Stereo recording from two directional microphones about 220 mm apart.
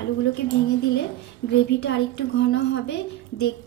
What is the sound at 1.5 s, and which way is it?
A woman's voice, 50° left (ahead or behind).